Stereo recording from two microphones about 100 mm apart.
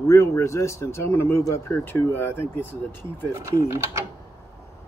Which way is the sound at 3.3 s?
30° right (ahead or behind).